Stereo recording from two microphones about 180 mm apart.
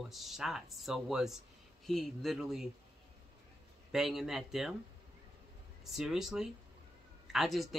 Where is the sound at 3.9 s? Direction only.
Centre (ahead or behind).